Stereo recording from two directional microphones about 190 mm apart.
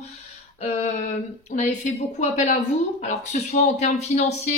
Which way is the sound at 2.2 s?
40° left (ahead or behind).